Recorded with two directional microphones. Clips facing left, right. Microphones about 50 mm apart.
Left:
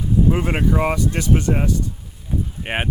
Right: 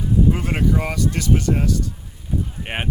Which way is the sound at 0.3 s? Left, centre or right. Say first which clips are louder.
Left 1 dB; centre.